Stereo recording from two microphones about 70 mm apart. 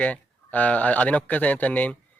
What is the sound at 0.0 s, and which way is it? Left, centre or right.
Speech, left.